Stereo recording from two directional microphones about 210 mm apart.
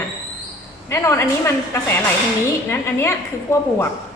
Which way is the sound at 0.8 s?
10° left (ahead or behind).